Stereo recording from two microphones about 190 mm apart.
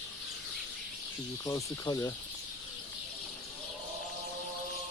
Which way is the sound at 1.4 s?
20° left (ahead or behind).